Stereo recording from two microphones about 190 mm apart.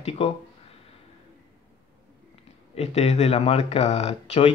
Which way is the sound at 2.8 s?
35° left (ahead or behind).